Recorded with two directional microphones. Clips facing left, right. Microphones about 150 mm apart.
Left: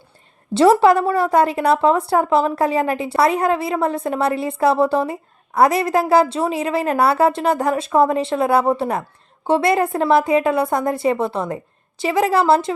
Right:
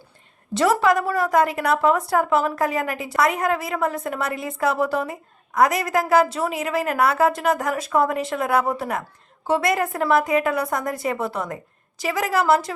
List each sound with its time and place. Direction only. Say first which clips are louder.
0.5 s a woman's voice: left 6 dB; 30° left (ahead or behind)